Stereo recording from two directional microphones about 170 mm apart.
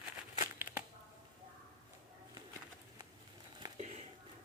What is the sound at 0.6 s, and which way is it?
Shuffling cards, 10° right (ahead or behind).